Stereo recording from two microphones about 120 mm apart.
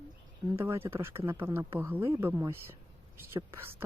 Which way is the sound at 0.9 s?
20° right (ahead or behind).